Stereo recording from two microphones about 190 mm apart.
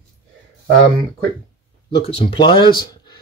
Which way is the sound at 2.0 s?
30° left (ahead or behind).